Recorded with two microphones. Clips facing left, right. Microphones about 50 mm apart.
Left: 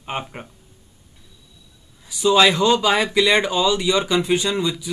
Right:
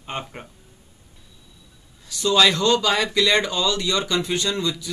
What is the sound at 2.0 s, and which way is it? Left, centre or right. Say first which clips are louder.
Speech: left 3 dB; centre.